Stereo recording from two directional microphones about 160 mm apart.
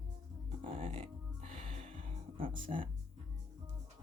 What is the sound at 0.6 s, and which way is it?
Music, 35° right (ahead or behind).